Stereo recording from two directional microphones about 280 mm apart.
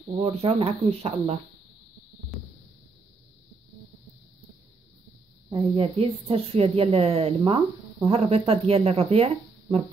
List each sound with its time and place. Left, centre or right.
0.2 s a woman's voice: right
5.8 s a woman's voice: right